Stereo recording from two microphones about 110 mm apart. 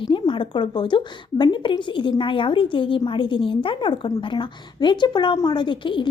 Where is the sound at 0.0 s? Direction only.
50° left (ahead or behind).